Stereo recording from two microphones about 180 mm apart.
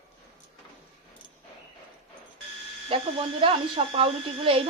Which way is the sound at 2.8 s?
30° right (ahead or behind).